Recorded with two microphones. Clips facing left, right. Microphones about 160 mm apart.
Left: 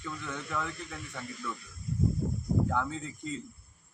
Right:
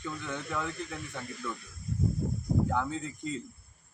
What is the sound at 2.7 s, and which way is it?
Speech, 5° right (ahead or behind).